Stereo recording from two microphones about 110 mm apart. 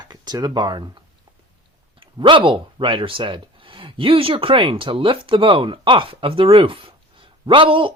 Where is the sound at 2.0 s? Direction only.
45° right (ahead or behind).